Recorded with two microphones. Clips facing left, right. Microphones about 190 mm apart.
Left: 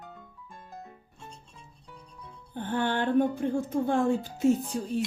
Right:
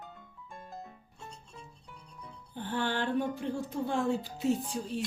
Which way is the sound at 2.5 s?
55° left (ahead or behind).